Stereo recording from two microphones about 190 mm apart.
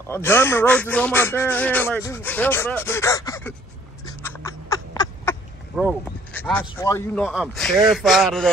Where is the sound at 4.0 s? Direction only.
15° left (ahead or behind).